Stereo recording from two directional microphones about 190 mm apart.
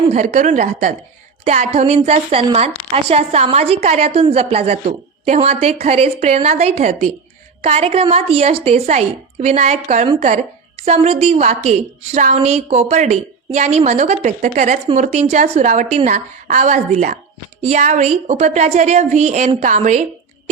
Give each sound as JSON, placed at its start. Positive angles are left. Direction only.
{"t": 0.1, "sound": "a woman's voice", "side_deg": -40}